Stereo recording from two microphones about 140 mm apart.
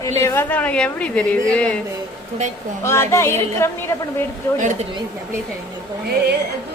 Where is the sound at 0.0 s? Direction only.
20° left (ahead or behind).